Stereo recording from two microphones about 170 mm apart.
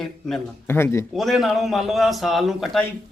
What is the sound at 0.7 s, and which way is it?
Speech, 15° left (ahead or behind).